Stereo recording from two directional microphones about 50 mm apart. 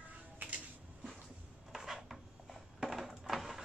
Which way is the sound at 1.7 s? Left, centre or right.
Centre.